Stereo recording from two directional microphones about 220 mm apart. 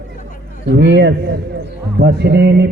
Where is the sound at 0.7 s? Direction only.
50° right (ahead or behind).